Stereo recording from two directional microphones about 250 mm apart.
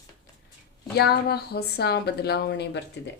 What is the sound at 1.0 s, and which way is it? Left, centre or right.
A woman's voice, left.